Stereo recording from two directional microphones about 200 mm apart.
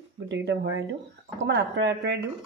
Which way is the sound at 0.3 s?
60° right (ahead or behind).